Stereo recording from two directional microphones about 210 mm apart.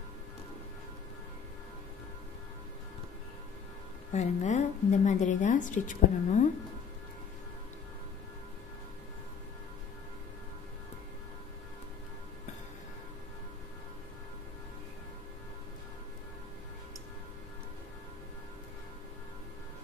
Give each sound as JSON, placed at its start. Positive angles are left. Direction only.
{"t": 4.1, "sound": "speech", "side_deg": 35}